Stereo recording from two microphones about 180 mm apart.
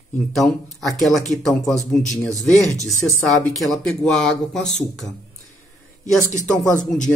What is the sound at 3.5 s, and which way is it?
Speech, 5° left (ahead or behind).